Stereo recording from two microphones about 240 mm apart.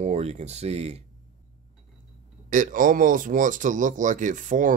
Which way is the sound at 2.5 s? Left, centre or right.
Right.